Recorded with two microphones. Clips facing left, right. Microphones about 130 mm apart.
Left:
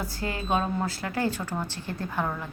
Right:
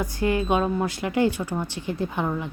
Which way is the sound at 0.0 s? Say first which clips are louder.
Right 8 dB; 20° right (ahead or behind).